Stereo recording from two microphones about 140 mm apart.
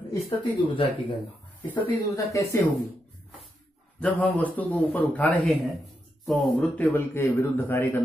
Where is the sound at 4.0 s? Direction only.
10° left (ahead or behind).